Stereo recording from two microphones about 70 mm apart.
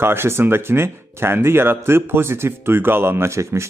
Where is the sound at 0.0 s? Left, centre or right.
Right.